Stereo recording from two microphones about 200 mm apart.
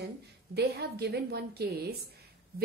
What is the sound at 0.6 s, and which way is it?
A woman's voice, 55° right (ahead or behind).